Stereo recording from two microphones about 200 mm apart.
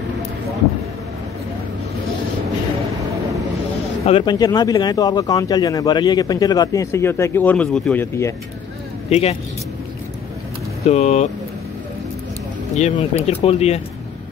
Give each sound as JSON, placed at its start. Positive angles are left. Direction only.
{"t": 4.0, "sound": "speech", "side_deg": 25}
{"t": 9.1, "sound": "speech", "side_deg": 30}
{"t": 10.8, "sound": "speech", "side_deg": 35}
{"t": 12.7, "sound": "speech", "side_deg": 35}